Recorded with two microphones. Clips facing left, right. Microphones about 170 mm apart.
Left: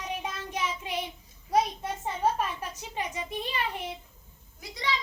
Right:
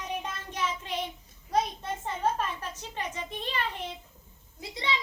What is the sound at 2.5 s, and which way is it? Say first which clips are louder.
A child's voice: left 2 dB; 10° left (ahead or behind).